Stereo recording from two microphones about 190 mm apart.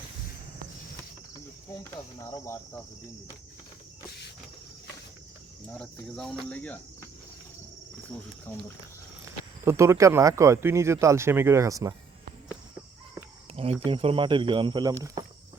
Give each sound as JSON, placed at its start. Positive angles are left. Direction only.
{"t": 5.7, "sound": "speech", "side_deg": 5}
{"t": 9.2, "sound": "speech", "side_deg": -15}
{"t": 13.8, "sound": "speech", "side_deg": -30}